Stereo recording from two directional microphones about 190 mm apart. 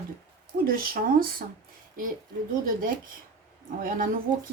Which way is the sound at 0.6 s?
50° right (ahead or behind).